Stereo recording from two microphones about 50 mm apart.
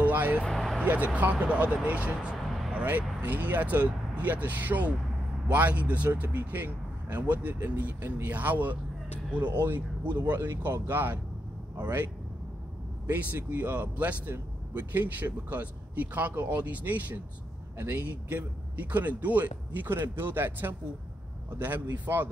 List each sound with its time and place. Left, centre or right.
0.0 s vehicle: right
0.5 s vehicle: centre
0.8 s a man's voice: right
2.3 s a sound: centre
2.7 s a man's voice: right
6.0 s a man's voice: right
7.5 s speech: right
7.8 s a man's voice: right